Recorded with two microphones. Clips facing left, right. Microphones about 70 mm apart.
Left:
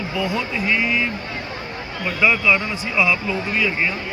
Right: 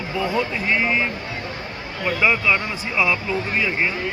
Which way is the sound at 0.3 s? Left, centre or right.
Right.